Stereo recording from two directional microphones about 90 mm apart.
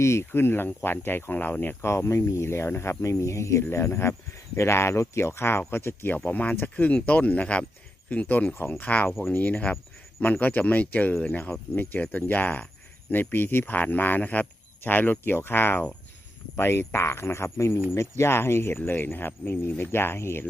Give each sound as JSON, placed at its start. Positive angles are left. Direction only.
{"t": 0.0, "sound": "speech", "side_deg": 30}